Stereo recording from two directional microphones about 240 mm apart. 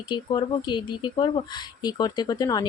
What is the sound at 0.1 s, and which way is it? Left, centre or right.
Speech, centre.